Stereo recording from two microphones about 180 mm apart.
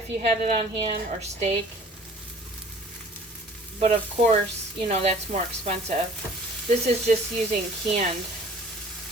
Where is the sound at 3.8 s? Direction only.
35° right (ahead or behind).